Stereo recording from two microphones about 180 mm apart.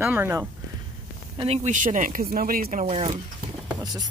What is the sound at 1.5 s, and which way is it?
Speech, 40° right (ahead or behind).